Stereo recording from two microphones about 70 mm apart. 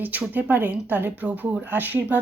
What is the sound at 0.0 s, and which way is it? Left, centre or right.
Speech, right.